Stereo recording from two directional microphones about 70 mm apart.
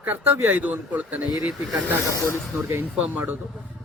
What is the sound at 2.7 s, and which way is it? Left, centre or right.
Speech, right.